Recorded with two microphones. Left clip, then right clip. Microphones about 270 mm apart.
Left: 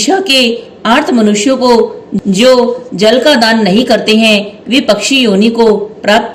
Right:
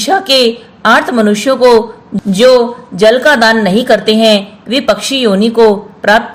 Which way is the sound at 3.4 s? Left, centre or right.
Right.